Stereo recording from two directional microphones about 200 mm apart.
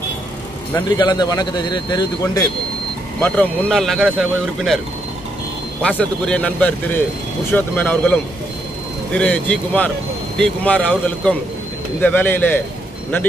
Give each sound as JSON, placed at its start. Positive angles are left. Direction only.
{"t": 0.8, "sound": "speech", "side_deg": 20}
{"t": 3.2, "sound": "speech", "side_deg": 10}
{"t": 5.8, "sound": "speech", "side_deg": 5}